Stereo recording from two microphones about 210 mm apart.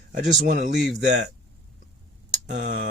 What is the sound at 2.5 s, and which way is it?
Speech, 35° right (ahead or behind).